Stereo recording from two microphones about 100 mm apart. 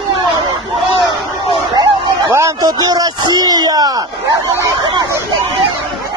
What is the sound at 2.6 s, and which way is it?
Speech, 40° right (ahead or behind).